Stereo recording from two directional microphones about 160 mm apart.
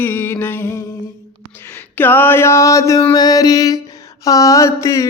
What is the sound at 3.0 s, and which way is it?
Music, 25° left (ahead or behind).